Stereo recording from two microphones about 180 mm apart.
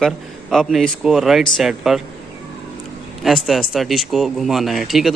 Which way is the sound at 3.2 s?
Centre (ahead or behind).